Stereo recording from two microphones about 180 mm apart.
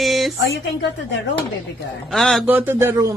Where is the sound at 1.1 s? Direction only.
90° left.